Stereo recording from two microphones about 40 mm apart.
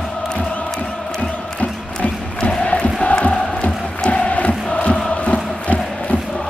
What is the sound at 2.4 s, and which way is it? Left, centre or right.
Music, left.